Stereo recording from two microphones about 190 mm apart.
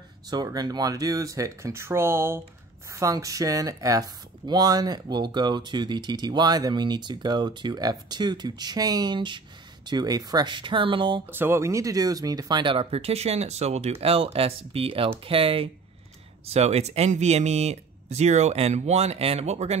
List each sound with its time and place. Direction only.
0.3 s speech: 20° right (ahead or behind)
11.2 s speech: 10° right (ahead or behind); by 19.8 s 35° right (ahead or behind)